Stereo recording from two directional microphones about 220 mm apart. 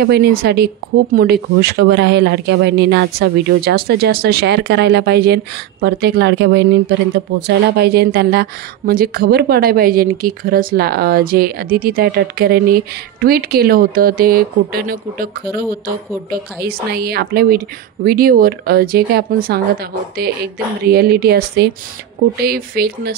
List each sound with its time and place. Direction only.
0.0 s speech: 45° right (ahead or behind)